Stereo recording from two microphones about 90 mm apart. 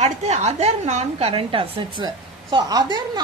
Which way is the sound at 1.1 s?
85° right.